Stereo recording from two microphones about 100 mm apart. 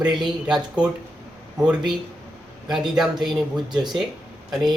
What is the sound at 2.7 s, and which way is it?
Speech, 5° right (ahead or behind).